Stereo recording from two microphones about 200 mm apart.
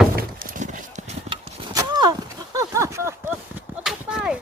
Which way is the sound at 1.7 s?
20° right (ahead or behind).